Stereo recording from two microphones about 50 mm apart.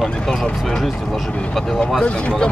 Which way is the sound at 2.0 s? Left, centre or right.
Centre.